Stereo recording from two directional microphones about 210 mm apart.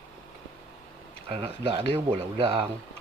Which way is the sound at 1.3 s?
25° right (ahead or behind).